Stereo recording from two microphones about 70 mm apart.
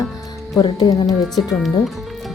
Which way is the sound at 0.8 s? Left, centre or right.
Left.